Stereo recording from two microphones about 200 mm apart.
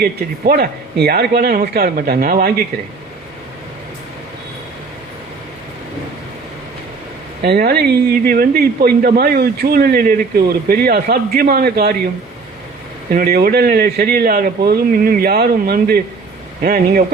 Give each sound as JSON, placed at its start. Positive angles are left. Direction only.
{"t": 0.0, "sound": "speech", "side_deg": -50}
{"t": 7.4, "sound": "speech", "side_deg": -50}
{"t": 13.1, "sound": "speech", "side_deg": -50}